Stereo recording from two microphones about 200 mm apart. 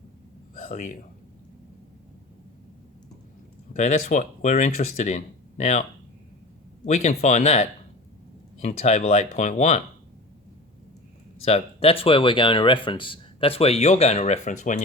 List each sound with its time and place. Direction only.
0.6 s a man's voice: 40° left (ahead or behind)
3.8 s speech: 35° left (ahead or behind)
6.8 s speech: 35° left (ahead or behind)
11.4 s speech: 30° left (ahead or behind)